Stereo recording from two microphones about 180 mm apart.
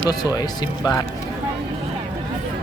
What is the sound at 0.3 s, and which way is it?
Speech, 20° left (ahead or behind).